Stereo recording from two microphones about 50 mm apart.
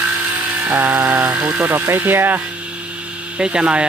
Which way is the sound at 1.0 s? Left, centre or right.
Right.